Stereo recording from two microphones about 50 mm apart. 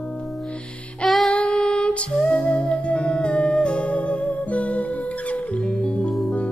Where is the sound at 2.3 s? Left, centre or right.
Left.